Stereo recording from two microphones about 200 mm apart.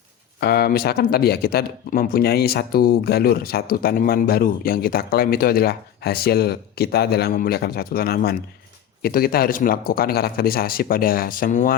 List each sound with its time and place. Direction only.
0.3 s speech: 50° left (ahead or behind)